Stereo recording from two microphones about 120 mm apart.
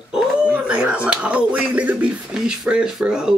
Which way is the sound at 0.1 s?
10° right (ahead or behind).